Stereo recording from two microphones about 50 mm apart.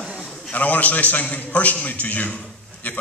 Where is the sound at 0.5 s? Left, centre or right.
Left.